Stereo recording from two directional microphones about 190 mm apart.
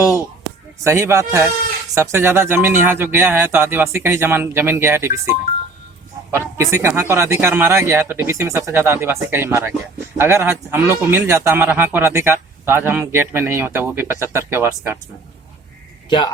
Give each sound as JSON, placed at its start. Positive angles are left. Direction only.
{"t": 0.9, "sound": "speech", "side_deg": -15}
{"t": 6.6, "sound": "speech", "side_deg": -15}
{"t": 16.0, "sound": "a man's voice", "side_deg": 25}